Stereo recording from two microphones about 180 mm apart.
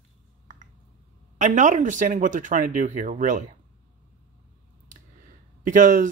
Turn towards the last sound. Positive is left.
turn(degrees=-45)  # may be behind; listen again after turning